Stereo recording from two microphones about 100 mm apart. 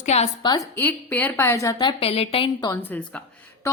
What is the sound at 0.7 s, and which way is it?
A woman's voice, 20° left (ahead or behind).